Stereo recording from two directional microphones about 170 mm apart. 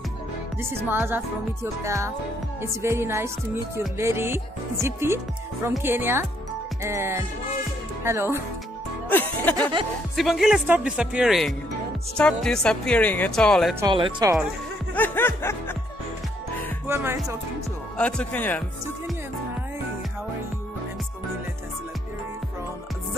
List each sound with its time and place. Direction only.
0.6 s speech: 15° right (ahead or behind)
9.1 s music: 10° left (ahead or behind)
10.1 s speech: centre (ahead or behind)
13.7 s speech: 25° right (ahead or behind)
15.0 s music: 10° left (ahead or behind)
16.8 s speech: 15° right (ahead or behind)
17.9 s speech: 5° left (ahead or behind)